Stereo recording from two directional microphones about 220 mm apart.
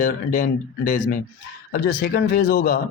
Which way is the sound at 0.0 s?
40° left (ahead or behind).